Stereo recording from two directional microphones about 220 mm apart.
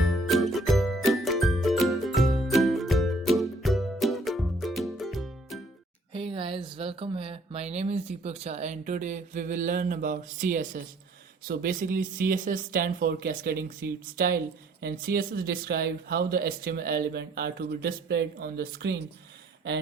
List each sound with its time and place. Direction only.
0.0 s music: centre (ahead or behind)
6.1 s speech: 25° right (ahead or behind); by 19.0 s 50° right (ahead or behind)